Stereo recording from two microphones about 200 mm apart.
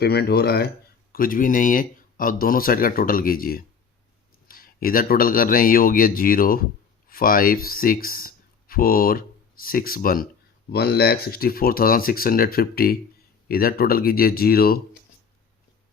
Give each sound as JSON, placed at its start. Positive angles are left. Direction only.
{"t": 0.0, "sound": "speech", "side_deg": 55}